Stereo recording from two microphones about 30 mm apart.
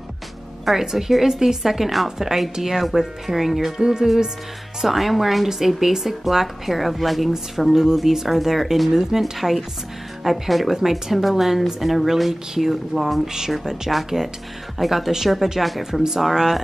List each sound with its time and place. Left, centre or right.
0.7 s speech: centre
2.0 s speech: centre
3.8 s speech: right
4.8 s speech: centre
7.7 s speech: centre
9.2 s speech: centre
10.2 s speech: centre
15.9 s speech: centre
16.3 s speech: centre